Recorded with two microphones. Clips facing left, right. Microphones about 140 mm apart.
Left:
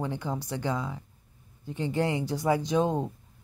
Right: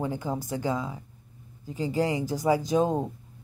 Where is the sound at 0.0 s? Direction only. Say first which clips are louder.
Right 2 dB; 5° right (ahead or behind).